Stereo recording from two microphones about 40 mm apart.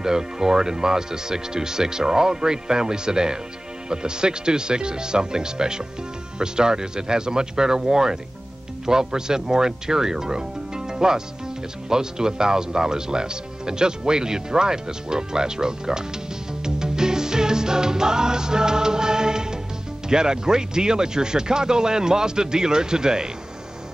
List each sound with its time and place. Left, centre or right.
0.0 s speech: centre
16.6 s music: centre
20.1 s speech: centre